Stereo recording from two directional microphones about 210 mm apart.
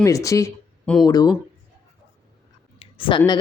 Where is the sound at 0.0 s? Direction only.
15° left (ahead or behind).